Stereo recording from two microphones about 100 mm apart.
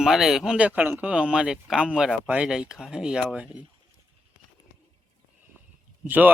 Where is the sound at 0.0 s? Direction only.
5° right (ahead or behind).